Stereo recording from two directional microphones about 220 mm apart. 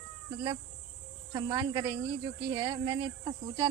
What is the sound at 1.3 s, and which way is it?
Speech, 20° right (ahead or behind).